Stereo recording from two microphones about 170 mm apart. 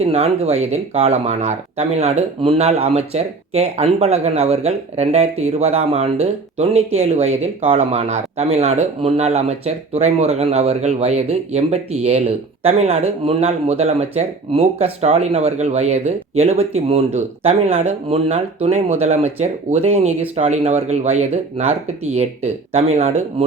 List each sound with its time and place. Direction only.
0.0 s speech: 40° right (ahead or behind)